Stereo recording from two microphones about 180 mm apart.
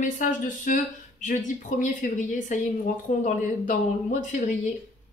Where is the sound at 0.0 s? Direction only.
45° left (ahead or behind).